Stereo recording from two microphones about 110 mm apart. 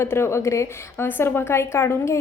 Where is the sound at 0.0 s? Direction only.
25° left (ahead or behind).